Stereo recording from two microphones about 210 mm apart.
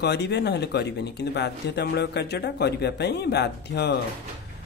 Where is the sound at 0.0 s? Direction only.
55° left (ahead or behind).